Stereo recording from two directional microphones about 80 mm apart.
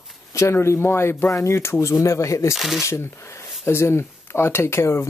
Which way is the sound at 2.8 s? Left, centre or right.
Left.